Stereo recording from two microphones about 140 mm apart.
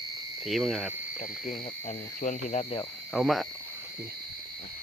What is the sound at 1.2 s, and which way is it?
Speech, 60° left (ahead or behind).